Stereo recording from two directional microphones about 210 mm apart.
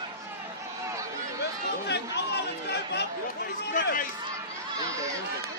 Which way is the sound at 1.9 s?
55° left (ahead or behind).